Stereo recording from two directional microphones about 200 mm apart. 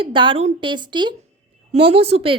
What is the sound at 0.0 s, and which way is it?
A woman's voice, 25° right (ahead or behind).